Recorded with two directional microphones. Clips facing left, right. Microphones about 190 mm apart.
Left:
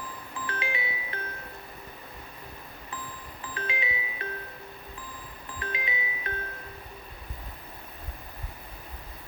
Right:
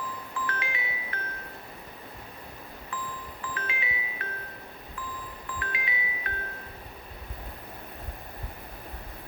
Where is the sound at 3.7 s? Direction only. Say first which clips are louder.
Left 2 dB; 20° left (ahead or behind).